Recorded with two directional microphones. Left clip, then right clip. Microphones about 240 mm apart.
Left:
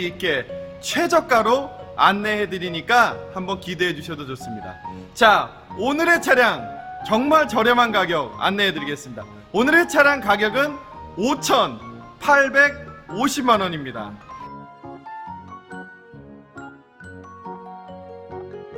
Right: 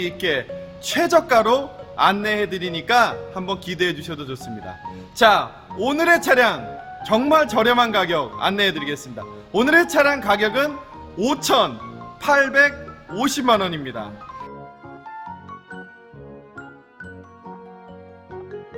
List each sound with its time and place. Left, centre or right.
0.0 s a man's voice: centre